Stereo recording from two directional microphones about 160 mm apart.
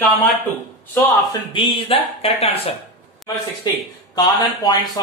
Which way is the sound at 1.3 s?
30° left (ahead or behind).